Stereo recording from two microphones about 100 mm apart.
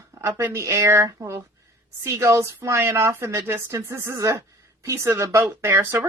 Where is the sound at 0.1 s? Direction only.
30° right (ahead or behind).